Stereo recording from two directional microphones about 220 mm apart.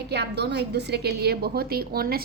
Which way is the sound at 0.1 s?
50° right (ahead or behind).